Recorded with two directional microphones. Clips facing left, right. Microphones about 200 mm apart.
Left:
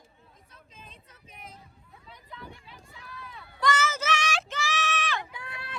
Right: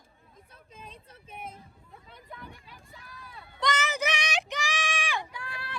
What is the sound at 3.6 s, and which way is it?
Child singing, 15° right (ahead or behind).